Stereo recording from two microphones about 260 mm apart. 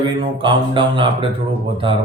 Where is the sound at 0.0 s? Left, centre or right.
Centre.